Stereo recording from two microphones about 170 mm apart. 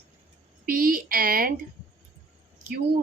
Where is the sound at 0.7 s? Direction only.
55° right (ahead or behind).